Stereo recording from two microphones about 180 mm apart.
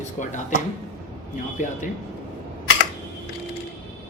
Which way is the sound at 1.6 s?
45° left (ahead or behind).